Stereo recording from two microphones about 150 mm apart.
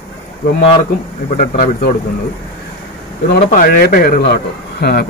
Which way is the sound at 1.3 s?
65° left (ahead or behind).